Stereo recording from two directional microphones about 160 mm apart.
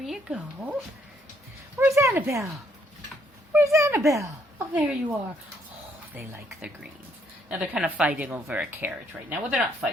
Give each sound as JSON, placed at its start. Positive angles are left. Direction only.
{"t": 0.0, "sound": "speech", "side_deg": -5}
{"t": 1.8, "sound": "a woman's voice", "side_deg": -15}
{"t": 3.5, "sound": "speech", "side_deg": -20}
{"t": 4.5, "sound": "speech", "side_deg": -10}
{"t": 7.5, "sound": "a woman's voice", "side_deg": -5}